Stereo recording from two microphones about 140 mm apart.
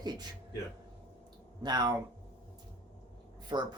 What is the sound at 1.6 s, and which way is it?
Speech, 30° right (ahead or behind).